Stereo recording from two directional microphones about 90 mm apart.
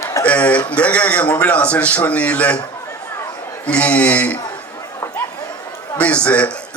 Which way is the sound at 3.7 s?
15° left (ahead or behind).